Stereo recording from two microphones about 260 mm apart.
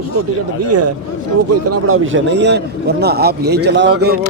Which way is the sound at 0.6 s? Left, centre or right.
Right.